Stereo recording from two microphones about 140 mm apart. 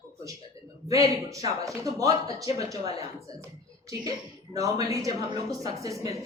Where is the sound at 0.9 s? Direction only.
25° right (ahead or behind).